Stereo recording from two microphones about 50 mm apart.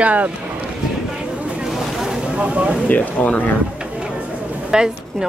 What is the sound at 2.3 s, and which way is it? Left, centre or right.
Speech, right.